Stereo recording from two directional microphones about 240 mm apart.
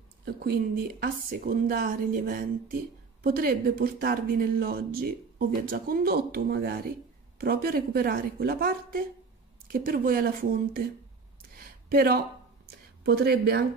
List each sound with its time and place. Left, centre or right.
0.2 s speech: right
11.5 s a sound: right
13.0 s speech: right